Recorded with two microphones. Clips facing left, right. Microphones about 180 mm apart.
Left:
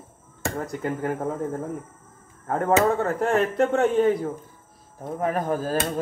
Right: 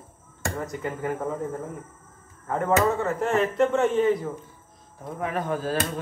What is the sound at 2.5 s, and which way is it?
Speech, 40° left (ahead or behind).